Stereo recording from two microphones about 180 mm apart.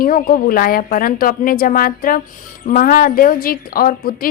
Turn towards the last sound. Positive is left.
turn(degrees=55)  # may be behind; listen again after turning